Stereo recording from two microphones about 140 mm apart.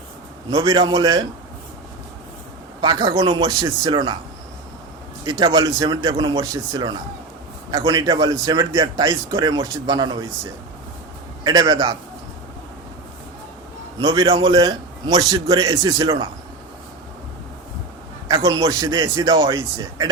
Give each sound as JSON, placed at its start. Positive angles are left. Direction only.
{"t": 0.5, "sound": "a man's voice", "side_deg": -30}
{"t": 2.8, "sound": "a man's voice", "side_deg": -30}
{"t": 5.2, "sound": "a man's voice", "side_deg": -30}
{"t": 11.4, "sound": "a man's voice", "side_deg": -30}
{"t": 14.0, "sound": "a man's voice", "side_deg": -30}
{"t": 18.3, "sound": "a man's voice", "side_deg": -25}